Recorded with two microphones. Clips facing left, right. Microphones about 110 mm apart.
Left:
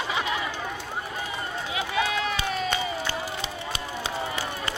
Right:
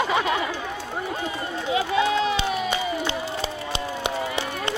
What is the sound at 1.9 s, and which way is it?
Run, 25° right (ahead or behind).